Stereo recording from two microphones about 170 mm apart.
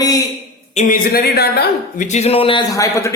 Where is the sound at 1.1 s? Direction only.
70° left (ahead or behind).